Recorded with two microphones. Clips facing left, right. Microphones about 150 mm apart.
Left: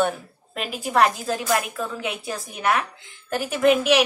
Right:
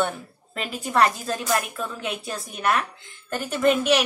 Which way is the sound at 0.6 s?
5° left (ahead or behind).